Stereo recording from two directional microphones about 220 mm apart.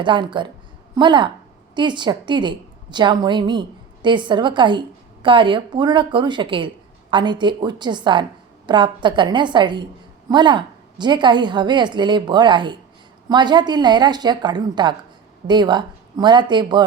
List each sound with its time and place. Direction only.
0.0 s a woman's voice: 20° right (ahead or behind)